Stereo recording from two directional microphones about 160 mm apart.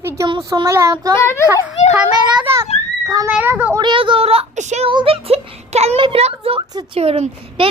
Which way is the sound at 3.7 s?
30° right (ahead or behind).